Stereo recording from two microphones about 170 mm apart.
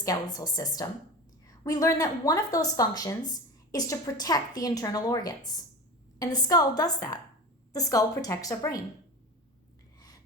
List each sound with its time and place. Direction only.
0.0 s a woman's voice: 20° left (ahead or behind)